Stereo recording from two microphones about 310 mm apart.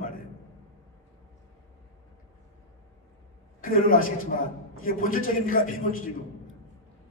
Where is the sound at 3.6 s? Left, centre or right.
Left.